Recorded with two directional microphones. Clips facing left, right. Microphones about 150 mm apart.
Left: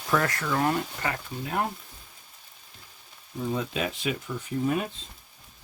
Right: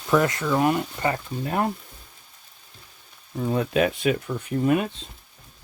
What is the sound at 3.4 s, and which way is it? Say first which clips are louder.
Speech: right 7 dB; 60° right (ahead or behind).